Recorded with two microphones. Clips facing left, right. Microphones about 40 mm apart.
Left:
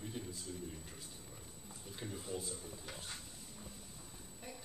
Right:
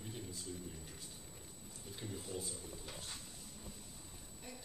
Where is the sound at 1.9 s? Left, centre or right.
Centre.